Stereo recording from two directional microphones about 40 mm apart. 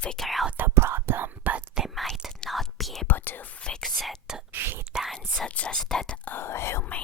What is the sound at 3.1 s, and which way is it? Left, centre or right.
Whispering, left.